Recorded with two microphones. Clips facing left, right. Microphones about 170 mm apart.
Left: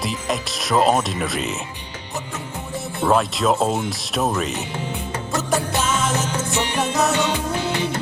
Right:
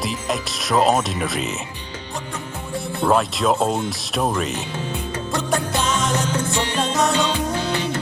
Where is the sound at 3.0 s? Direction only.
Centre (ahead or behind).